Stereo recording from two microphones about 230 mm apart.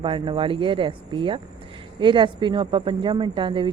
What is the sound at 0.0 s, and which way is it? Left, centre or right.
Speech, right.